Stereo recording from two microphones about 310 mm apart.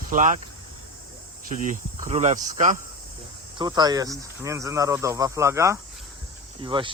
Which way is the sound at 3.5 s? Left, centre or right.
Centre.